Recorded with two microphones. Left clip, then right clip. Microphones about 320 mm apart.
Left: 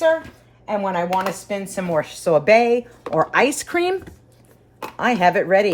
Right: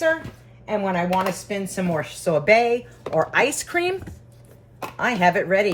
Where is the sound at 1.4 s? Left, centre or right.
Centre.